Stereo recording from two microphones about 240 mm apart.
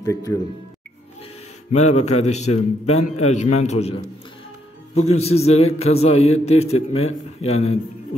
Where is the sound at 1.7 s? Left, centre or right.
Left.